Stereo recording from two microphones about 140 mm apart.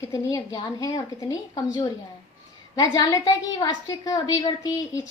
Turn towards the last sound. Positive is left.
turn(degrees=25)  # may be behind; listen again after turning